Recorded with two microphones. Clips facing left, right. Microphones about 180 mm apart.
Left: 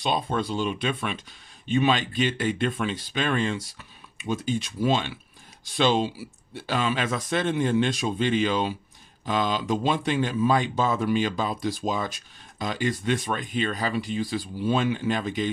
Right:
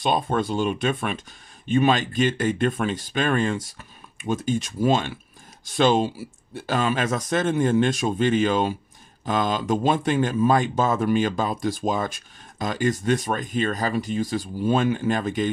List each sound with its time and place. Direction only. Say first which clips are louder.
0.0 s speech: right 3 dB; 50° right (ahead or behind)